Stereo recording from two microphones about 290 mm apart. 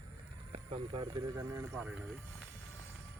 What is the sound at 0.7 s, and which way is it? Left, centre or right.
Speech, centre.